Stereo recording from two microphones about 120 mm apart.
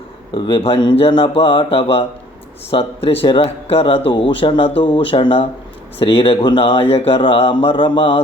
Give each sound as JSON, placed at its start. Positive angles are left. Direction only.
{"t": 0.3, "sound": "a man's voice", "side_deg": 40}